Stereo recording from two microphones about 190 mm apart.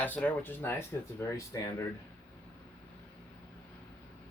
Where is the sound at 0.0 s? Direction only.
10° left (ahead or behind).